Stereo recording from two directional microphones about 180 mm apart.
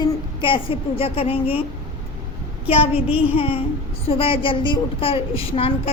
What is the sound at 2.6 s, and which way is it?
A woman's voice, 35° left (ahead or behind).